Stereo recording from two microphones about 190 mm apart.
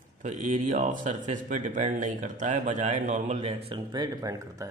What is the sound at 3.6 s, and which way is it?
Speech, 25° right (ahead or behind).